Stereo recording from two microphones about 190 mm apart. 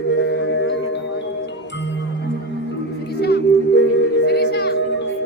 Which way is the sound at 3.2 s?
60° left (ahead or behind).